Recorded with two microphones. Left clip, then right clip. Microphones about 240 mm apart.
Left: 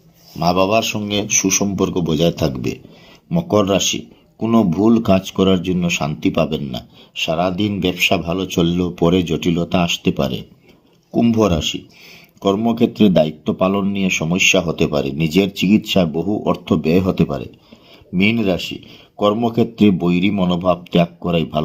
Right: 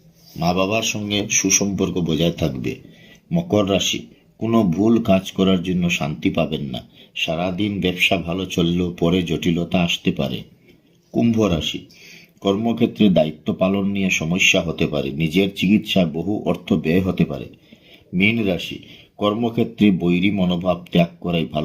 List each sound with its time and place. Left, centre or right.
0.3 s speech: left